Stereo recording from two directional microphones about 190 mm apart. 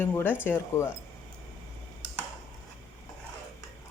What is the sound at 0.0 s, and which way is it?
Speech, 10° left (ahead or behind).